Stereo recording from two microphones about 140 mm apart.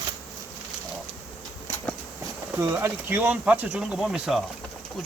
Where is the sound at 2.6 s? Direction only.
15° right (ahead or behind).